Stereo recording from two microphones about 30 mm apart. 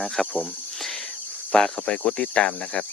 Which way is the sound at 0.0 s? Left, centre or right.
Centre.